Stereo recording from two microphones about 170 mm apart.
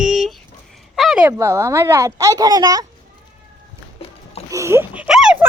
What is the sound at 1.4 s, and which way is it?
Speech, 15° right (ahead or behind).